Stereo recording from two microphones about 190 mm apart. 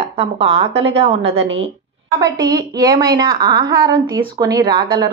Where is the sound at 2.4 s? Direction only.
20° right (ahead or behind).